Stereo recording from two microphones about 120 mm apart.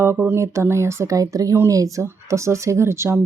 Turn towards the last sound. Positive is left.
turn(degrees=-25)  # may be behind; listen again after turning